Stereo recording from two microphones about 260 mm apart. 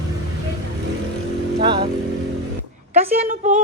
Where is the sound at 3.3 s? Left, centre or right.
Right.